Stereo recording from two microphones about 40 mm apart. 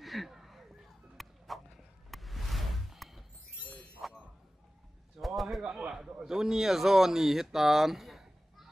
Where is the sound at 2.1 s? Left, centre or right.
Centre.